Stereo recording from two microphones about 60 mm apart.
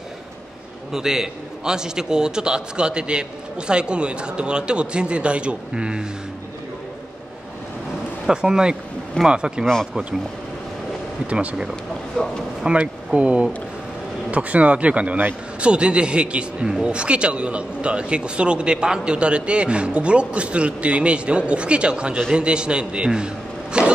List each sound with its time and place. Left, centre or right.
0.9 s speech: centre
8.3 s speech: centre
11.2 s speech: right
12.6 s a man's voice: centre